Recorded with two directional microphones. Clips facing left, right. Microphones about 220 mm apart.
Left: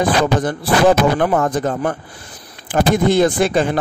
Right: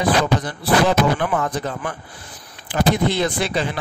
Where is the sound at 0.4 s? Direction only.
50° left (ahead or behind).